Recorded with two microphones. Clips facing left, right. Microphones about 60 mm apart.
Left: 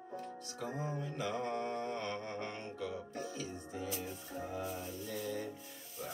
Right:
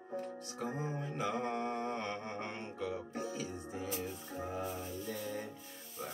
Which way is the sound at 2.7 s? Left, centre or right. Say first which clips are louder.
Right 4 dB; right.